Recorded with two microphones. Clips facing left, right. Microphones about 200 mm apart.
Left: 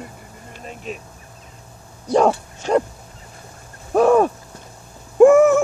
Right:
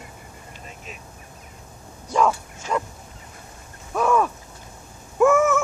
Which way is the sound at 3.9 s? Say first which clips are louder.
Left 7 dB; 35° left (ahead or behind).